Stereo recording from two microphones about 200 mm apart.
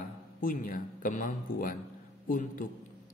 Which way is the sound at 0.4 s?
45° left (ahead or behind).